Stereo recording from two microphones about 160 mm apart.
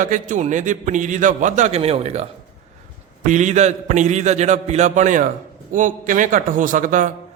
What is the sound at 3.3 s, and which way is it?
A man's voice, 50° right (ahead or behind).